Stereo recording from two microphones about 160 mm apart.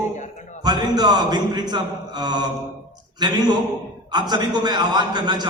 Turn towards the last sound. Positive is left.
turn(degrees=-25)  # may be behind; listen again after turning